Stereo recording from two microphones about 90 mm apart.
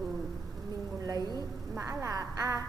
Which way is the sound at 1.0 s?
50° right (ahead or behind).